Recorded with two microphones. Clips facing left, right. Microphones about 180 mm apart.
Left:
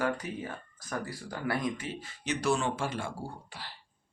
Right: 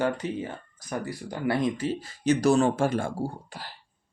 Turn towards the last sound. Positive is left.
turn(degrees=-45)  # may be behind; listen again after turning